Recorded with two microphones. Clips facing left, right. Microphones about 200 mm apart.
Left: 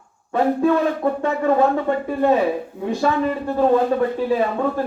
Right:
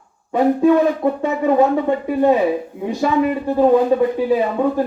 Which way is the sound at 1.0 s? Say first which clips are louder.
Right 2 dB; 15° right (ahead or behind).